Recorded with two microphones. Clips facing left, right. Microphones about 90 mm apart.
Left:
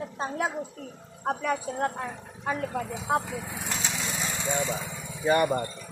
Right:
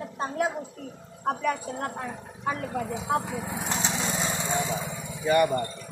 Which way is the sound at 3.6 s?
25° right (ahead or behind).